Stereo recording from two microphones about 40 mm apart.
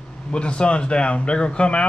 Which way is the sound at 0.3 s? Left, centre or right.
Left.